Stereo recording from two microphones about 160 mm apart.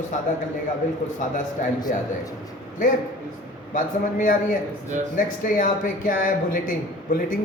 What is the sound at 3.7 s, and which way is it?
A man's voice, 55° left (ahead or behind).